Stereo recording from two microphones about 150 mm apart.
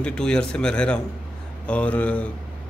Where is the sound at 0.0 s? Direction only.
5° left (ahead or behind).